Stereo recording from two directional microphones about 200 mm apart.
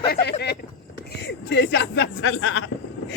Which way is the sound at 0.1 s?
55° left (ahead or behind).